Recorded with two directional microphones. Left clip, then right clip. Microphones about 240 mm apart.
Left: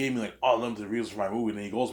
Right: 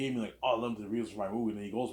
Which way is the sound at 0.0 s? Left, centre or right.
Left.